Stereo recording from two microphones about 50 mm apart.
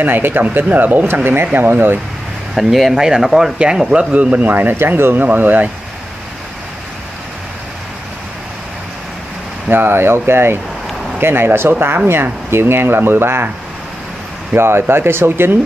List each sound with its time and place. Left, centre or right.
0.0 s speech: right
2.5 s speech: centre
3.5 s speech: centre
4.1 s speech: right
4.7 s speech: right
9.7 s speech: right
14.5 s speech: right